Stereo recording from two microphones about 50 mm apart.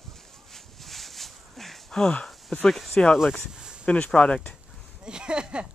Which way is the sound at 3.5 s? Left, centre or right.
Centre.